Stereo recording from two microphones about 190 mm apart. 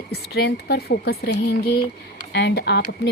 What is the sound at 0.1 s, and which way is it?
Speech, 60° left (ahead or behind).